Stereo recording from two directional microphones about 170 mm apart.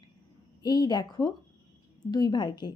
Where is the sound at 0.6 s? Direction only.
25° left (ahead or behind).